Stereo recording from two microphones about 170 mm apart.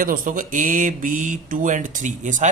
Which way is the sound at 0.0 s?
55° right (ahead or behind).